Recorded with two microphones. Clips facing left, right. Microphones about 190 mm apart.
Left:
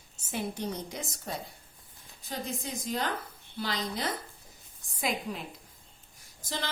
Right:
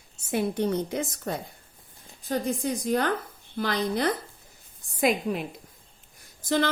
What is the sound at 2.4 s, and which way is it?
A woman's voice, 50° right (ahead or behind).